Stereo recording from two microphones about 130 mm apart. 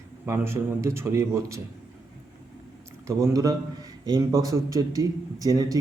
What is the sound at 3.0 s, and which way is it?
A man's voice, 25° right (ahead or behind).